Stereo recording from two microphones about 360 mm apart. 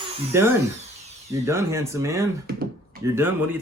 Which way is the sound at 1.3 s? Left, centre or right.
Centre.